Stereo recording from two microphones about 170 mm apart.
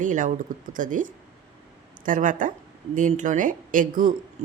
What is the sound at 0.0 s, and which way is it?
Speech, 50° right (ahead or behind).